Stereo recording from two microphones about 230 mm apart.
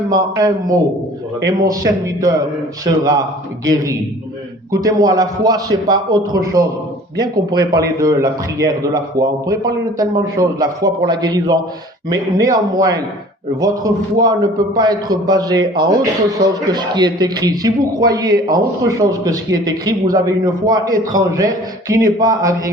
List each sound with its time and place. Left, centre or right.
0.1 s speech: centre
4.7 s speech: centre